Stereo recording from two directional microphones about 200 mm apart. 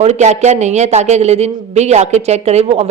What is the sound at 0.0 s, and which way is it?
A man's voice, 35° right (ahead or behind).